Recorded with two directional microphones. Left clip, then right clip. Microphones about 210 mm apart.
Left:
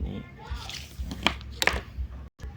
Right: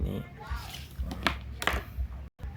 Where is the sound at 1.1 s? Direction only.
25° right (ahead or behind).